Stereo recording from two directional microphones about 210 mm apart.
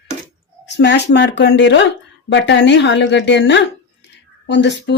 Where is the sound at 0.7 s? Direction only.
55° left (ahead or behind).